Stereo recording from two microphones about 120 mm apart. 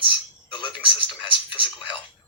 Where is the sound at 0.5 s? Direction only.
40° left (ahead or behind).